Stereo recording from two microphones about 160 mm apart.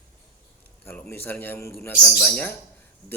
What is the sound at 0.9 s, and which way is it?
A man's voice, 10° left (ahead or behind).